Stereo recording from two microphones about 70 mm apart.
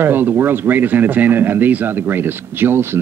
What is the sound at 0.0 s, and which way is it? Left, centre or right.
A man's voice, right.